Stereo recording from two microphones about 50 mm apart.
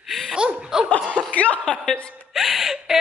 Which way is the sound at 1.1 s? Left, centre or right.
Right.